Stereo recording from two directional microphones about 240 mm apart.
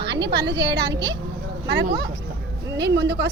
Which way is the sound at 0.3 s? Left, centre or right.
Right.